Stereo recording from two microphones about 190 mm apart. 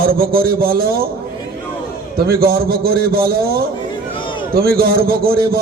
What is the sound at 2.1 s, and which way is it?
A man's voice, 55° right (ahead or behind).